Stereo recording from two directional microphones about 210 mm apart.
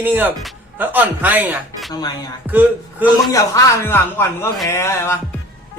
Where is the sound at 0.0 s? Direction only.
10° right (ahead or behind).